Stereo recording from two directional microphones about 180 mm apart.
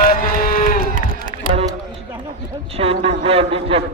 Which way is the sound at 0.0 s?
55° left (ahead or behind).